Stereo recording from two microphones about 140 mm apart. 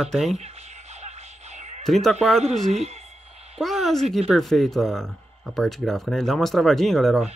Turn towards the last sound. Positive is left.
turn(degrees=0)  # may be behind; listen again after turning